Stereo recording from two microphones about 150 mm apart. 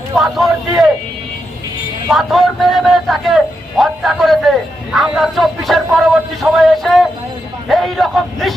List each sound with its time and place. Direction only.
0.2 s a man's voice: centre (ahead or behind)
2.0 s a man's voice: centre (ahead or behind)